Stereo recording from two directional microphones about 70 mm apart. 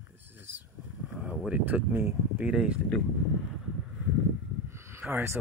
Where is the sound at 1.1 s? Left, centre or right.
Centre.